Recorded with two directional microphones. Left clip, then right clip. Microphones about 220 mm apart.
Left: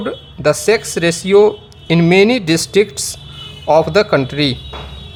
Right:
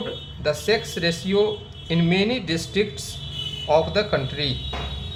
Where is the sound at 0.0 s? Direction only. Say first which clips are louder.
Left 10 dB; 55° left (ahead or behind).